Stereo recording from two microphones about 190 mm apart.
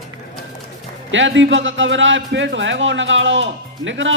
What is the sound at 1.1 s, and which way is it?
A man's voice, 75° right (ahead or behind).